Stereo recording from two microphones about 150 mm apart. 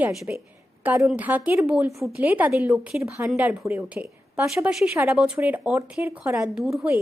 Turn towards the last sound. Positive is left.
turn(degrees=0)  # may be behind; listen again after turning